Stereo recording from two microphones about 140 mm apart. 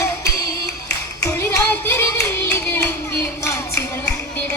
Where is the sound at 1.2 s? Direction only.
20° left (ahead or behind).